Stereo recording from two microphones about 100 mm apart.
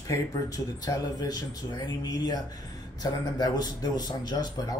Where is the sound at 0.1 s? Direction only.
40° left (ahead or behind).